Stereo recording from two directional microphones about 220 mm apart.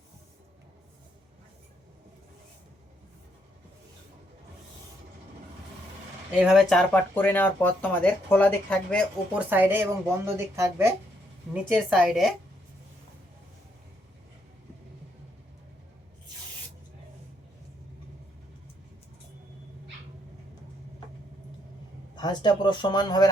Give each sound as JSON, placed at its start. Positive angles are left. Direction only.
{"t": 6.3, "sound": "speech", "side_deg": -5}
{"t": 9.5, "sound": "a woman's voice", "side_deg": -10}
{"t": 22.1, "sound": "speech", "side_deg": 20}